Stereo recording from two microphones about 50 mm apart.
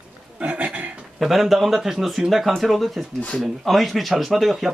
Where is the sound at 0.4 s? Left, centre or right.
Right.